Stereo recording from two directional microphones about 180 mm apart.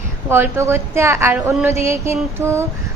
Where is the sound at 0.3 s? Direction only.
15° right (ahead or behind).